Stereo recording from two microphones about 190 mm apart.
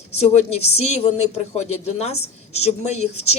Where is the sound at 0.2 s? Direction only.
35° left (ahead or behind).